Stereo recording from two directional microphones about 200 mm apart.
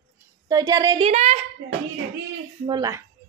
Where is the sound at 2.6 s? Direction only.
20° right (ahead or behind).